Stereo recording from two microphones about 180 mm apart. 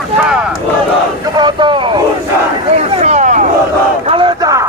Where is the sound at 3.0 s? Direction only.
40° right (ahead or behind).